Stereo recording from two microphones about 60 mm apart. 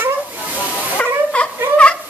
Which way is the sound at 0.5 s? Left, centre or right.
Left.